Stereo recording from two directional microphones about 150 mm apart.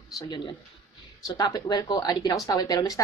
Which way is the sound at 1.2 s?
25° left (ahead or behind).